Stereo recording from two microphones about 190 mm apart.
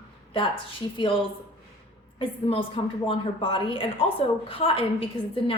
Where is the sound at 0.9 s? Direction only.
25° left (ahead or behind).